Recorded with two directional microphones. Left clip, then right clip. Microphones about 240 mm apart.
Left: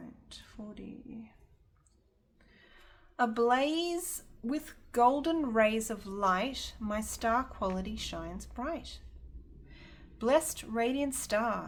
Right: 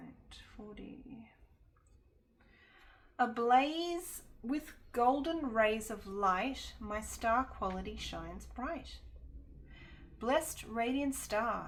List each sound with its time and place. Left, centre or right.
0.6 s a sound: left
3.2 s a woman's voice: left
10.2 s a woman's voice: left